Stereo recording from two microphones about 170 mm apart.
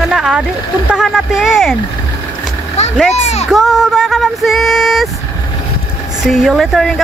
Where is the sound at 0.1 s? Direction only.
5° right (ahead or behind).